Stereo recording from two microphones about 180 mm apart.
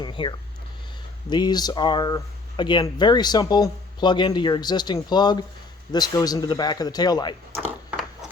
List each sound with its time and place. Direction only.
0.0 s speech: 25° left (ahead or behind)